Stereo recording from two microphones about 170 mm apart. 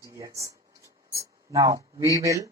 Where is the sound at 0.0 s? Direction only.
20° right (ahead or behind).